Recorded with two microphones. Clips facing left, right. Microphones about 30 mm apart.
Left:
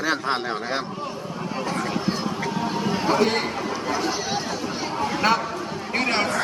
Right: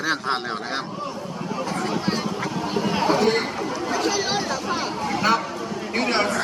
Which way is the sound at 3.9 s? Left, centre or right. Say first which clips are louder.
Right 3 dB; right.